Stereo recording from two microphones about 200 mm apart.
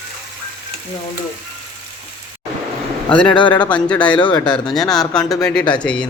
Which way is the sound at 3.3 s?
25° left (ahead or behind).